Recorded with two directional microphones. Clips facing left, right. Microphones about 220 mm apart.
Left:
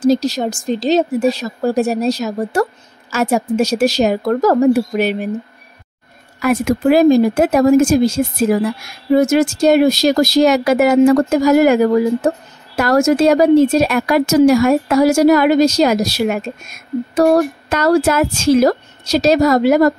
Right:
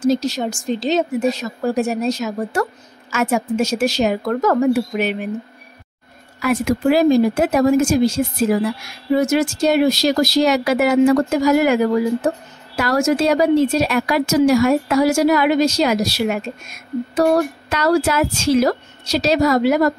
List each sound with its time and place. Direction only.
0.0 s speech: 35° left (ahead or behind)
6.4 s a woman's voice: 50° left (ahead or behind)